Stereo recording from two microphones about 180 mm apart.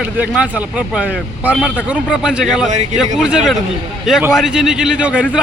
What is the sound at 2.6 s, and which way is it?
Speech, 40° right (ahead or behind).